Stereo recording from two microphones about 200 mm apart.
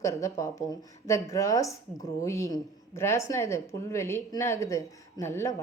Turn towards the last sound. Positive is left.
turn(degrees=15)  # may be behind; listen again after turning